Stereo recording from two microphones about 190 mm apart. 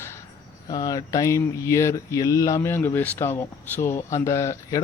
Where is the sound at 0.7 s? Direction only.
20° left (ahead or behind).